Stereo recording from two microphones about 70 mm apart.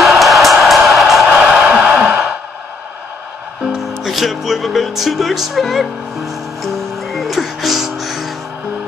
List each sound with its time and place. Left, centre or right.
0.2 s music: centre
1.4 s a sound: centre
3.6 s music: centre